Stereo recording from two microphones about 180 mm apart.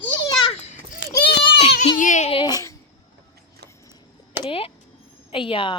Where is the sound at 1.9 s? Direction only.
45° left (ahead or behind).